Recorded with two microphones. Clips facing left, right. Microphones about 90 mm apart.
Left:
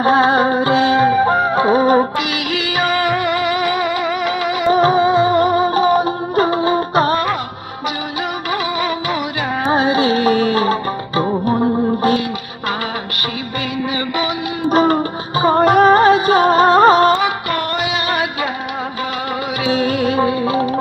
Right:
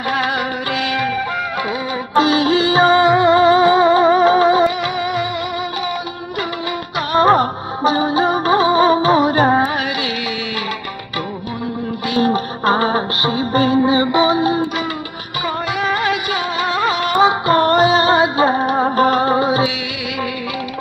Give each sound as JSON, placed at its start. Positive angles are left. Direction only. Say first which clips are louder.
{"t": 0.0, "sound": "music", "louder": "left 7 dB", "side_deg": 30}
{"t": 2.1, "sound": "music", "louder": "right 7 dB", "side_deg": -30}
{"t": 4.6, "sound": "music", "louder": "left 7 dB", "side_deg": 35}
{"t": 7.2, "sound": "music", "louder": "right 7 dB", "side_deg": -35}
{"t": 9.7, "sound": "music", "louder": "left 7 dB", "side_deg": 30}
{"t": 12.2, "sound": "music", "louder": "right 7 dB", "side_deg": -35}
{"t": 14.7, "sound": "music", "louder": "left 9 dB", "side_deg": 40}
{"t": 17.2, "sound": "music", "louder": "right 6 dB", "side_deg": -30}